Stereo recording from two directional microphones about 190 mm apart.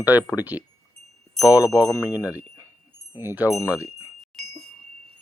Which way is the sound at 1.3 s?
15° left (ahead or behind).